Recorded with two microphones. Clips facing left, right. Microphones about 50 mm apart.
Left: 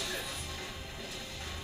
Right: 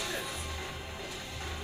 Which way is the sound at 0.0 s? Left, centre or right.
Centre.